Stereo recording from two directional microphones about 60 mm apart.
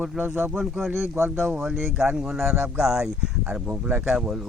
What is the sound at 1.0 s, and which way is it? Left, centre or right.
Speech, right.